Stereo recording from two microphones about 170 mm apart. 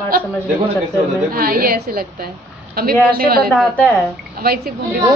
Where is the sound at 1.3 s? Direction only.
60° right (ahead or behind).